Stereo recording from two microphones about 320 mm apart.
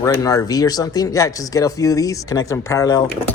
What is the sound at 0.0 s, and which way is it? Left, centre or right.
Speech, centre.